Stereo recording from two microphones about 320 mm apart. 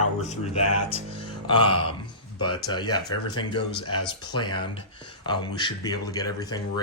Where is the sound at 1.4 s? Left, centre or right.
Centre.